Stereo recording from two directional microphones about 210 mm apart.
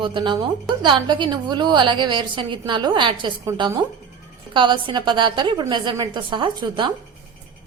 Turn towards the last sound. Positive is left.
turn(degrees=-20)  # may be behind; listen again after turning